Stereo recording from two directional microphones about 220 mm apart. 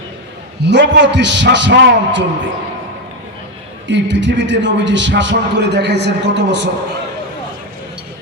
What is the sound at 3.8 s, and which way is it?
A man's voice, 55° right (ahead or behind).